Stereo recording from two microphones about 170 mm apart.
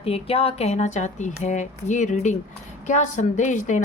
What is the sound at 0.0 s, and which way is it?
Speech, 35° left (ahead or behind).